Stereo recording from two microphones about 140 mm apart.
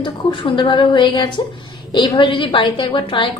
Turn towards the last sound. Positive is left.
turn(degrees=35)  # may be behind; listen again after turning